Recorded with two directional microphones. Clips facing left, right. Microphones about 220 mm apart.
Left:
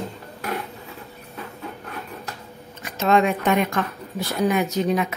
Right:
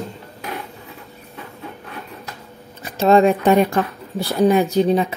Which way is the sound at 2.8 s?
30° right (ahead or behind).